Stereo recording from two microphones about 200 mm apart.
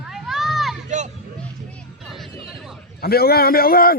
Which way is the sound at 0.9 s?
35° right (ahead or behind).